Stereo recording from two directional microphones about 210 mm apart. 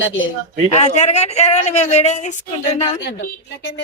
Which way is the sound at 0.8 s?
30° left (ahead or behind).